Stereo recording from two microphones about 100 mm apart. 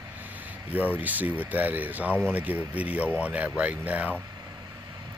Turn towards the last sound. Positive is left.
turn(degrees=-15)  # may be behind; listen again after turning